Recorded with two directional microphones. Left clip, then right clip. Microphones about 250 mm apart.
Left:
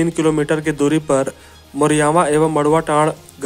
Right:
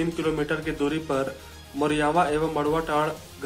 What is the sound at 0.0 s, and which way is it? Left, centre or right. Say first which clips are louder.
Speech: left 9 dB; left.